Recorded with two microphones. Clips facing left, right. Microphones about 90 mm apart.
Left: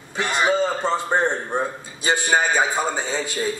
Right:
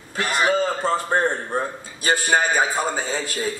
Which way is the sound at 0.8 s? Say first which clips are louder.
Even; 5° right (ahead or behind).